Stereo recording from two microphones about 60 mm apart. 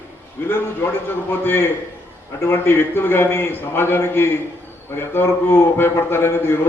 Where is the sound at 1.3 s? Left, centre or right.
Left.